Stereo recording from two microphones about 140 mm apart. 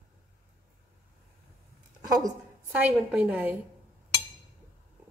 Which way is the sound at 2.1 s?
25° right (ahead or behind).